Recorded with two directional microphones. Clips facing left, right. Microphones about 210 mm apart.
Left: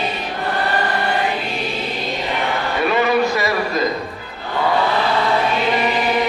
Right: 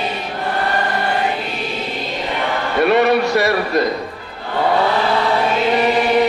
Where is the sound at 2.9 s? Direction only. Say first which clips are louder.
Right 3 dB; 65° right (ahead or behind).